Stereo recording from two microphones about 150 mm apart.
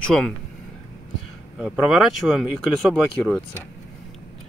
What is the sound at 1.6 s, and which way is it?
Speech, centre (ahead or behind).